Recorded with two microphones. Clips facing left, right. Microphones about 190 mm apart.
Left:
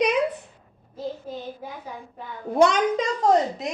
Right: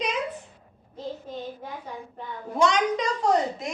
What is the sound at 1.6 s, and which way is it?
Speech, 5° left (ahead or behind).